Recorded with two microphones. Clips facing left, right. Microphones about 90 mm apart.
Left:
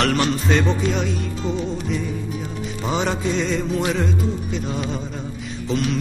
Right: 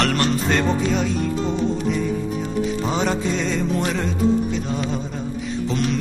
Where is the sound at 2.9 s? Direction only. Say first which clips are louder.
Right 1 dB; centre (ahead or behind).